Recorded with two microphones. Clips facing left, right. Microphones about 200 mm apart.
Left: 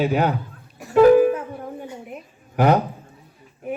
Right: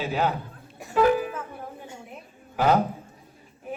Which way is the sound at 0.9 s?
40° left (ahead or behind).